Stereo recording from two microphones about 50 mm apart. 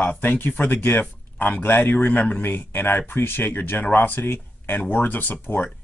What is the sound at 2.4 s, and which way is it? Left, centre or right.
Speech, left.